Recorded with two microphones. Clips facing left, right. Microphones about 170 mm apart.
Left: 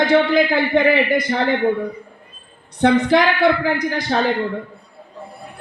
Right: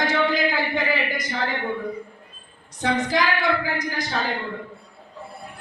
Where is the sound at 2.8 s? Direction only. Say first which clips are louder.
Left 8 dB; 60° left (ahead or behind).